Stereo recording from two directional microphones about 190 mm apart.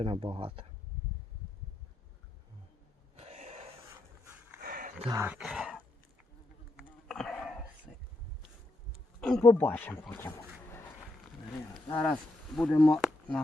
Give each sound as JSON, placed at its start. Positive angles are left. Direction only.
{"t": 0.0, "sound": "speech", "side_deg": -30}
{"t": 3.2, "sound": "a sound", "side_deg": -35}
{"t": 4.6, "sound": "a sound", "side_deg": -45}
{"t": 5.1, "sound": "speech", "side_deg": -10}
{"t": 6.7, "sound": "hiccup", "side_deg": 0}
{"t": 9.2, "sound": "speech", "side_deg": 5}
{"t": 11.9, "sound": "speech", "side_deg": 10}